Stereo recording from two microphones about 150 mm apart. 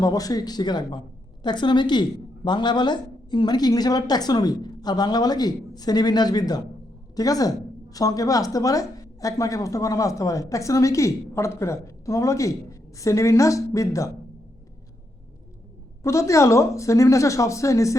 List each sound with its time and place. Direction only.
0.0 s a woman's voice: 25° left (ahead or behind)
16.0 s a woman's voice: 20° left (ahead or behind)